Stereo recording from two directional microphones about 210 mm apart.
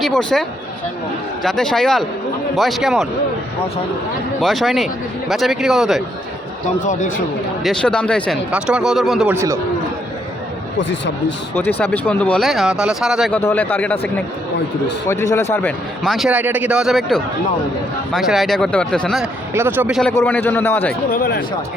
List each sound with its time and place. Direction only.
0.0 s speech: 5° left (ahead or behind)
1.5 s speech: centre (ahead or behind)
4.4 s speech: centre (ahead or behind)
7.6 s speech: 5° left (ahead or behind)
9.3 s a man's voice: 15° right (ahead or behind)
10.8 s speech: 60° left (ahead or behind)
11.8 s a man's voice: 5° left (ahead or behind)
15.1 s a man's voice: 15° left (ahead or behind)
19.5 s a man's voice: 10° right (ahead or behind)
20.0 s a man's voice: 10° left (ahead or behind)
21.1 s speech: 45° left (ahead or behind)